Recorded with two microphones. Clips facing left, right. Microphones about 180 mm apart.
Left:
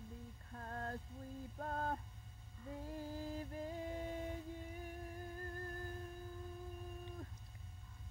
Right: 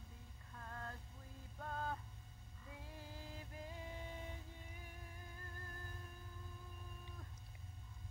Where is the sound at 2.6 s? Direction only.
40° left (ahead or behind).